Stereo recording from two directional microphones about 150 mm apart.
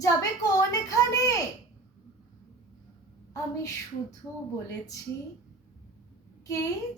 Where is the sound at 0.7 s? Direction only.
20° left (ahead or behind).